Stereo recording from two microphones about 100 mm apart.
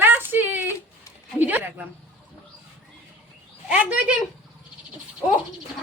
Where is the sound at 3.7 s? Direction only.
15° right (ahead or behind).